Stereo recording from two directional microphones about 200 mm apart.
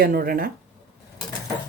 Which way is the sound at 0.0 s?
50° right (ahead or behind).